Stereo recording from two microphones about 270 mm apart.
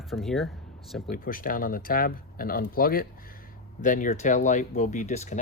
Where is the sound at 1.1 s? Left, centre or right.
Left.